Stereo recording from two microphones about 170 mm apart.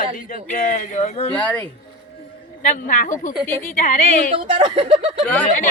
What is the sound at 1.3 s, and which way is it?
Speech, 10° left (ahead or behind).